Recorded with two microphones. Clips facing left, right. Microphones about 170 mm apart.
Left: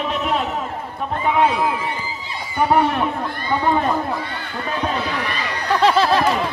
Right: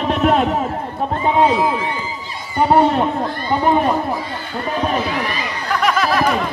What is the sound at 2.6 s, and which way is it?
Speech, 25° right (ahead or behind).